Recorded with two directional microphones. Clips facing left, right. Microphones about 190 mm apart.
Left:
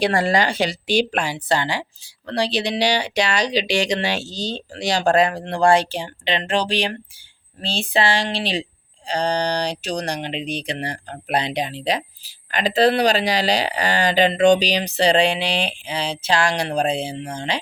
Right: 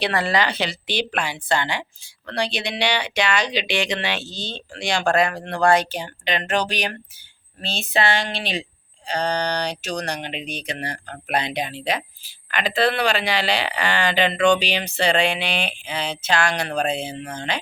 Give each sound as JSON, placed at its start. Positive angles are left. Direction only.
{"t": 0.0, "sound": "a woman's voice", "side_deg": 45}